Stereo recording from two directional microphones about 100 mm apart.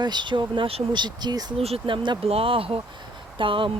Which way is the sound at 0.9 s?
45° right (ahead or behind).